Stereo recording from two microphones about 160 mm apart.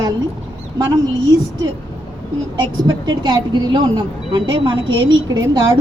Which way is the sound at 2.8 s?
25° right (ahead or behind).